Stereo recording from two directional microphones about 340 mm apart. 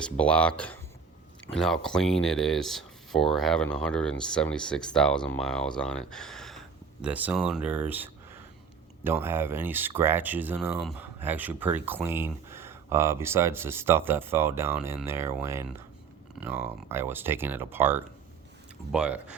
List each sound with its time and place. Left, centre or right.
0.0 s speech: centre